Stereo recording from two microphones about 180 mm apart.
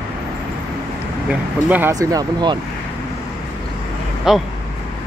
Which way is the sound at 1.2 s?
10° right (ahead or behind).